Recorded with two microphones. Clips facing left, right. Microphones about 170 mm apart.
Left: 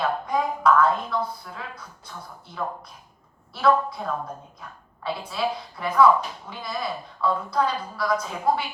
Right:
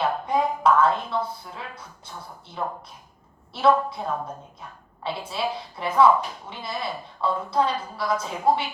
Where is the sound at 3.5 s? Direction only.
25° right (ahead or behind).